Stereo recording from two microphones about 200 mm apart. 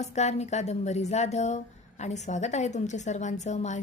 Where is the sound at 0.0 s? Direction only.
35° left (ahead or behind).